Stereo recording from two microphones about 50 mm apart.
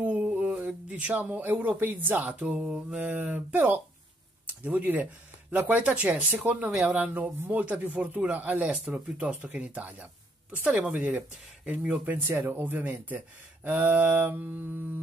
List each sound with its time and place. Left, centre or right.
0.0 s mantra: right
0.7 s a sound: right
1.1 s speech: right
2.6 s mantra: centre
3.0 s speech: right
5.9 s speech: right
6.7 s mantra: centre
7.0 s speech: right
12.2 s speech: right
14.3 s mantra: right